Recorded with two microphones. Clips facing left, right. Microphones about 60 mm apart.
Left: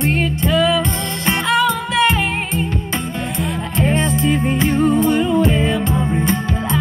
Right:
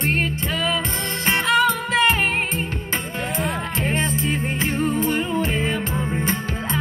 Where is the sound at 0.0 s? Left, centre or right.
Right.